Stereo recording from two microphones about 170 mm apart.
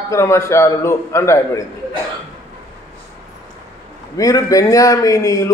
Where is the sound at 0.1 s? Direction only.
15° left (ahead or behind).